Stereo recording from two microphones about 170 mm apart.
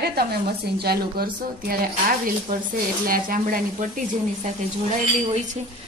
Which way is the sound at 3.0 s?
55° right (ahead or behind).